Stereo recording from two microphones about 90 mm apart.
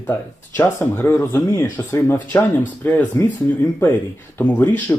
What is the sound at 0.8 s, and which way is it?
Speech, 25° left (ahead or behind).